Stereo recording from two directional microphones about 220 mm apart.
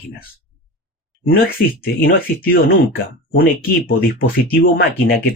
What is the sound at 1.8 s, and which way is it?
Speech, 45° left (ahead or behind).